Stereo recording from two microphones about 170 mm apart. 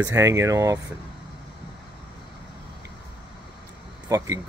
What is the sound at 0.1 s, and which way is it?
Speech, 20° right (ahead or behind).